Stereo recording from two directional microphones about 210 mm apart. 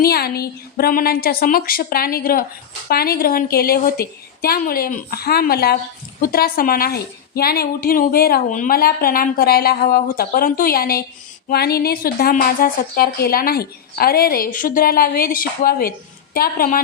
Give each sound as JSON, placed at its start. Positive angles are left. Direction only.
{"t": 0.0, "sound": "a woman's voice", "side_deg": 45}